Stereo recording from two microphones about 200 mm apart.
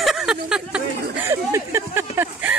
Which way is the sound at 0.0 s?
Centre (ahead or behind).